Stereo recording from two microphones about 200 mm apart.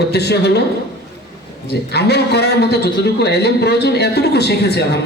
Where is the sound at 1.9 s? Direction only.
55° left (ahead or behind).